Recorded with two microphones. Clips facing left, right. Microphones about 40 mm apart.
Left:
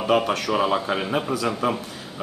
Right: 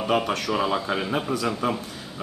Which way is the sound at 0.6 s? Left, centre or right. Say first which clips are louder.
Left 3 dB; left.